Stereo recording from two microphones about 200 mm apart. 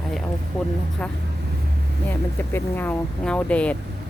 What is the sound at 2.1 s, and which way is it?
Speech, 10° left (ahead or behind).